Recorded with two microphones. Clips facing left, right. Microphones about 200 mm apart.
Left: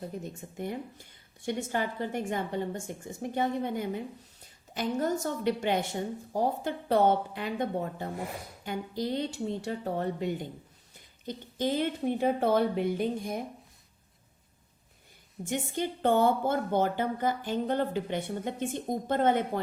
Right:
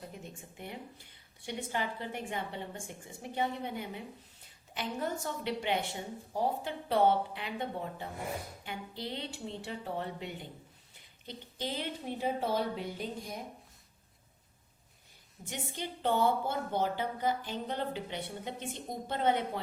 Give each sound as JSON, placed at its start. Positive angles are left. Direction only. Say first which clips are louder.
{"t": 0.2, "sound": "speech", "louder": "left 9 dB", "side_deg": 40}
{"t": 15.4, "sound": "speech", "louder": "left 8 dB", "side_deg": 50}